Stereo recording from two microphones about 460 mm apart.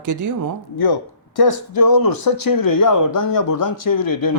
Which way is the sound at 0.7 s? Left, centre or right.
Left.